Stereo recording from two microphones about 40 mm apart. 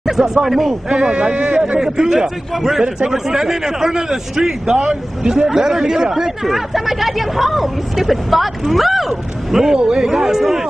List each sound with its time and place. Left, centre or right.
0.0 s a sound: centre
0.3 s speech: centre
0.8 s speech: centre
1.3 s speech: right
1.8 s speech: centre